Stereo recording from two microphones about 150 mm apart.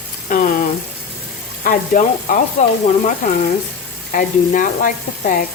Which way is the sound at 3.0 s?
60° left (ahead or behind).